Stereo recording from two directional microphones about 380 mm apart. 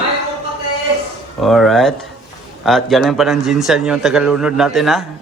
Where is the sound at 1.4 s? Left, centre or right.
Centre.